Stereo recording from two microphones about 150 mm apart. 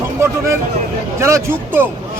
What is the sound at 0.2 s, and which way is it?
A man's voice, 20° right (ahead or behind).